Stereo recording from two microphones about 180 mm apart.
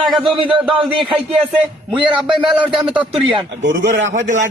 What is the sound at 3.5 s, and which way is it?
Speech, 80° right.